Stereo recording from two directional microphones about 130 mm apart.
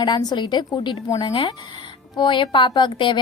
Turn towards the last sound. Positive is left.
turn(degrees=35)  # may be behind; listen again after turning